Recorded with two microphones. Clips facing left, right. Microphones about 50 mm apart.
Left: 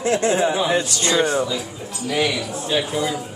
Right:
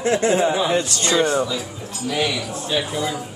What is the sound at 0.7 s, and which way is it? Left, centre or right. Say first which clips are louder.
Speech: even; left.